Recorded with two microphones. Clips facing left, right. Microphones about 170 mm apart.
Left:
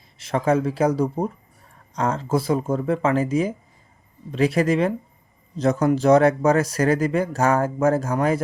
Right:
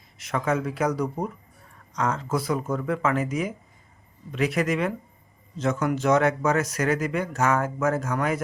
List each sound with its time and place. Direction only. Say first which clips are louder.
0.2 s speech: left 5 dB; 30° left (ahead or behind)